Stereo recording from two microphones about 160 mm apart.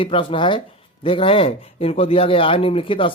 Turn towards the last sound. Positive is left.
turn(degrees=35)  # may be behind; listen again after turning